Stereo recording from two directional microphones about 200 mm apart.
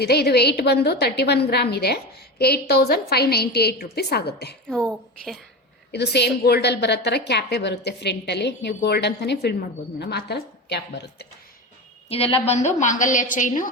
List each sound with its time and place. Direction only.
0.0 s a woman's voice: 55° left (ahead or behind)
5.9 s a woman's voice: 55° left (ahead or behind)
12.0 s a woman's voice: 30° left (ahead or behind)